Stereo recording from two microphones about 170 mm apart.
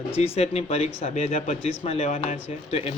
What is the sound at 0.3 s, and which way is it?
Speech, 40° left (ahead or behind).